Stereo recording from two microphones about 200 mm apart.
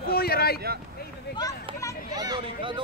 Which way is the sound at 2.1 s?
20° right (ahead or behind).